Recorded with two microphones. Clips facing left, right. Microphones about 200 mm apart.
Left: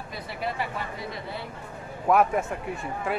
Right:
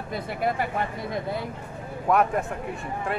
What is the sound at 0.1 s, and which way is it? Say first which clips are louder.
Speech: right 6 dB; 50° right (ahead or behind).